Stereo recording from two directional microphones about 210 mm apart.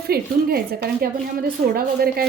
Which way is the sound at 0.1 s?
45° right (ahead or behind).